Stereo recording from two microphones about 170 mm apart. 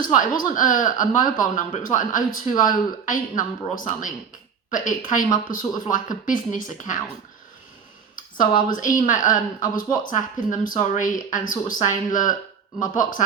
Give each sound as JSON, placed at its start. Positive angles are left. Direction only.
{"t": 0.0, "sound": "speech", "side_deg": 50}
{"t": 8.1, "sound": "speech", "side_deg": 55}